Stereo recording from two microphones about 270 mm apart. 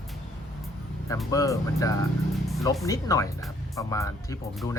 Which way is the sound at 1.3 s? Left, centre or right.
Centre.